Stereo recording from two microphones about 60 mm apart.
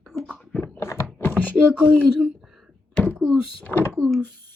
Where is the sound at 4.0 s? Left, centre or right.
Centre.